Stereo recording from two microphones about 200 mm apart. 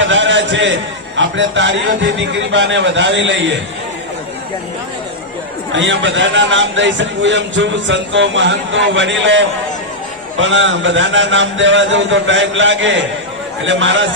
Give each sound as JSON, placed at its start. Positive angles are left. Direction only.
{"t": 0.0, "sound": "a sound", "side_deg": -70}
{"t": 1.1, "sound": "a man's voice", "side_deg": -65}
{"t": 5.7, "sound": "a man's voice", "side_deg": -65}